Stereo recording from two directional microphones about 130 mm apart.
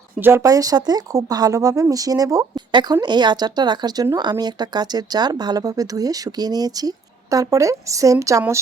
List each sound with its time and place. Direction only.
0.2 s speech: 15° right (ahead or behind)
0.4 s speech: 25° right (ahead or behind)